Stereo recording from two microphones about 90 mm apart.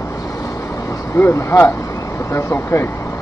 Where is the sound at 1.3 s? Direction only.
30° left (ahead or behind).